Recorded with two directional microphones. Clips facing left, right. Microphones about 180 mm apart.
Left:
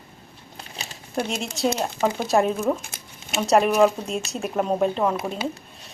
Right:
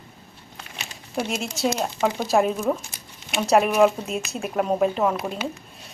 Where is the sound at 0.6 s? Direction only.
35° left (ahead or behind).